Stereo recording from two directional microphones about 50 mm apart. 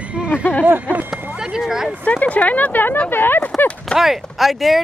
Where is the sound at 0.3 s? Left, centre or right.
Left.